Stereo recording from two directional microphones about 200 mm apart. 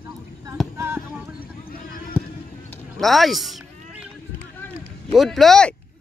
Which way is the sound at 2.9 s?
Centre (ahead or behind).